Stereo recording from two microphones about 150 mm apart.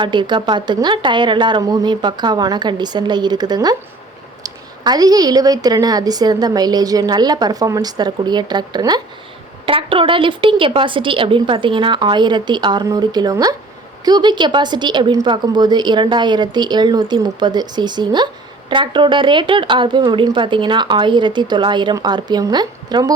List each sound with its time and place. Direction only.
0.0 s a woman's voice: 30° right (ahead or behind)